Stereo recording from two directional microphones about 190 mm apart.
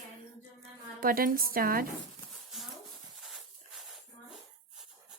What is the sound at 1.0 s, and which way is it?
Speech, 50° right (ahead or behind).